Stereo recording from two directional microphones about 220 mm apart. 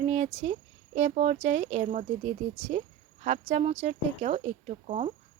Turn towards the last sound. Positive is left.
turn(degrees=-30)  # may be behind; listen again after turning